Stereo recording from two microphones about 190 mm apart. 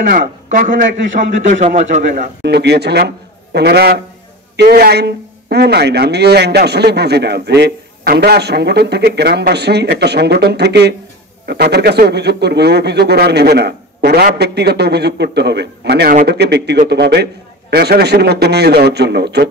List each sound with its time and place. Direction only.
0.1 s a man's voice: 45° right (ahead or behind)
2.4 s speech: 60° right (ahead or behind)